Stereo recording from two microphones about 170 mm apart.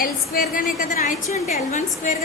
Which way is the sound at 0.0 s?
55° left (ahead or behind).